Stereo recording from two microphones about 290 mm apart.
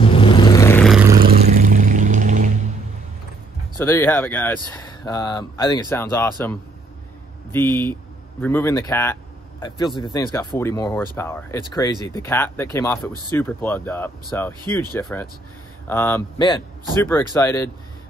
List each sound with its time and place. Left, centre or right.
0.0 s vehicle: centre
1.2 s vehicle: right
3.8 s speech: centre